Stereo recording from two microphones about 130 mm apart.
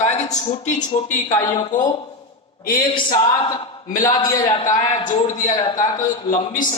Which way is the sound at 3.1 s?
35° left (ahead or behind).